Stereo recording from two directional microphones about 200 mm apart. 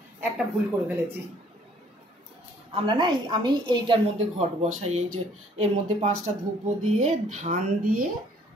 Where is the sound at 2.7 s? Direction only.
25° right (ahead or behind).